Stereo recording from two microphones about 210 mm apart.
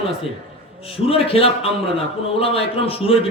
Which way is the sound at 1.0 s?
25° left (ahead or behind).